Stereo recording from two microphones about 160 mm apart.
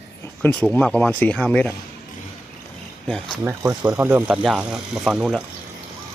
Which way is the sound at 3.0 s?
5° left (ahead or behind).